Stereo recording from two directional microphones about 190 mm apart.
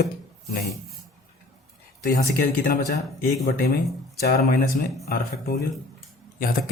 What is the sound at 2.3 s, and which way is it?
Speech, 50° left (ahead or behind).